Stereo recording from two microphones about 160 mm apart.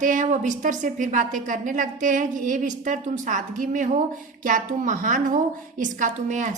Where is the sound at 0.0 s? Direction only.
50° right (ahead or behind).